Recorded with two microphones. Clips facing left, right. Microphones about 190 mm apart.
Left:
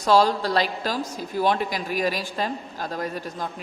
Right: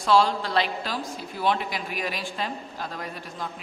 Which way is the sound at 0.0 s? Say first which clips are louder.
Left 2 dB; 40° left (ahead or behind).